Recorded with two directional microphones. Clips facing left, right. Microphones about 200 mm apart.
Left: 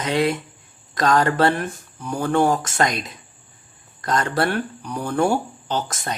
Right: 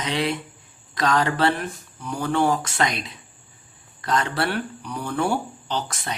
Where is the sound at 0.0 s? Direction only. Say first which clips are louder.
Left 4 dB; 45° left (ahead or behind).